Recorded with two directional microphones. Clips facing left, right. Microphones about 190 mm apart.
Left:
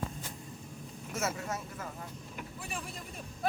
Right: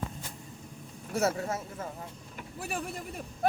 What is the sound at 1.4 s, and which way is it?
Speech, 30° right (ahead or behind).